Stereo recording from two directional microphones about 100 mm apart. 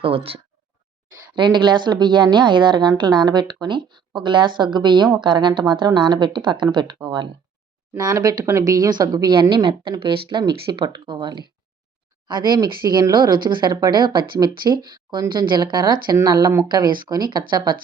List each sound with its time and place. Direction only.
0.0 s speech: 70° right (ahead or behind)
1.4 s speech: 50° right (ahead or behind)
8.1 s speech: 35° right (ahead or behind); by 9.9 s 60° right (ahead or behind)
10.2 s speech: 50° right (ahead or behind)